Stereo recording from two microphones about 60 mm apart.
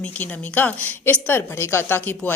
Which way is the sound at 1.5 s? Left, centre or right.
Left.